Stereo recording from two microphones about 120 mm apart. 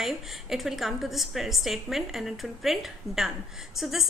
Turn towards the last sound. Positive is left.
turn(degrees=0)  # may be behind; listen again after turning